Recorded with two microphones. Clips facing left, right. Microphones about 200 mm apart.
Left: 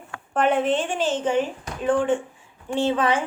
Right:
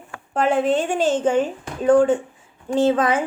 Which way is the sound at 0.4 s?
35° right (ahead or behind).